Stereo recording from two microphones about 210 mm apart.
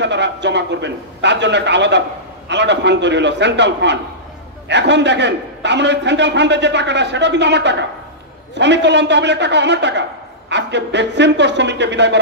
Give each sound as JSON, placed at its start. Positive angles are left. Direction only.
{"t": 0.0, "sound": "a man's voice", "side_deg": -55}